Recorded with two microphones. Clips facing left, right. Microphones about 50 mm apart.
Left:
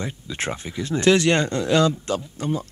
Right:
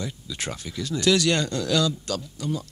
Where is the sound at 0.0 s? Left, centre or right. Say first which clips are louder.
Left 4 dB; left.